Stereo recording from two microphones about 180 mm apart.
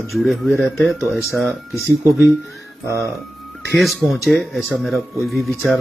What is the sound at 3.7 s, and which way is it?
Speech, centre (ahead or behind).